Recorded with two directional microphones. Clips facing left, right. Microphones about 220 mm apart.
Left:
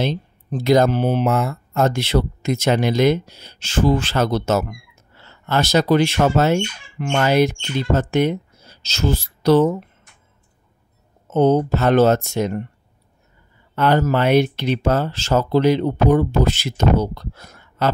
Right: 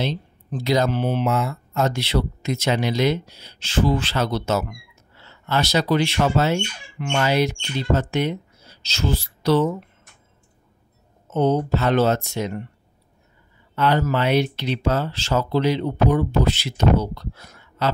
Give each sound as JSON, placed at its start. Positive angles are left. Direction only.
{"t": 0.0, "sound": "speech", "side_deg": 45}
{"t": 11.3, "sound": "speech", "side_deg": 45}
{"t": 13.7, "sound": "speech", "side_deg": 45}